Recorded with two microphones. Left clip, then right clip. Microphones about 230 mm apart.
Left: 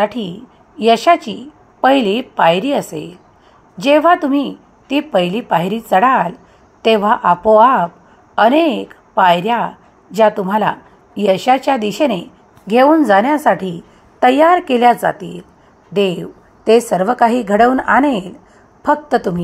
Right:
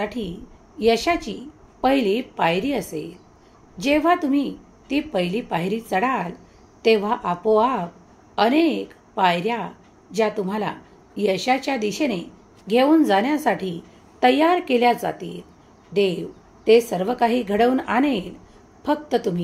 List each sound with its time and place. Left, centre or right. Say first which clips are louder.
0.0 s a woman's voice: left 10 dB; left